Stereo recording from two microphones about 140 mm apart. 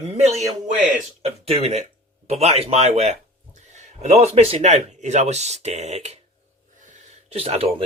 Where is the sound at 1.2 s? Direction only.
45° right (ahead or behind).